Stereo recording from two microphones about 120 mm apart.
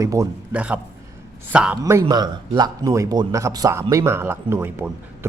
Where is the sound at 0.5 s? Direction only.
10° right (ahead or behind).